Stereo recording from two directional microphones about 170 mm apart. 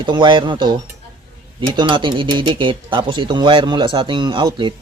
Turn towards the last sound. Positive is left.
turn(degrees=-30)  # may be behind; listen again after turning